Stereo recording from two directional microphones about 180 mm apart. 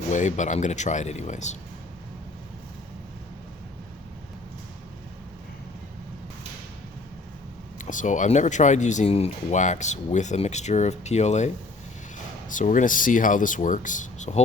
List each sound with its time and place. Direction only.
0.1 s speech: 40° left (ahead or behind)
7.8 s speech: 45° left (ahead or behind)